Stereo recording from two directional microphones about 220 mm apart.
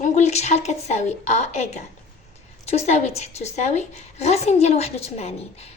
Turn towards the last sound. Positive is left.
turn(degrees=30)  # may be behind; listen again after turning